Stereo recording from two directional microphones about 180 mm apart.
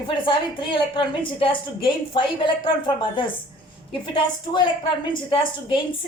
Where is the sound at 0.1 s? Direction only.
30° left (ahead or behind).